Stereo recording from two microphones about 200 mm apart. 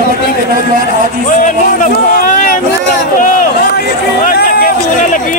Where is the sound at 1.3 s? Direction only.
40° left (ahead or behind).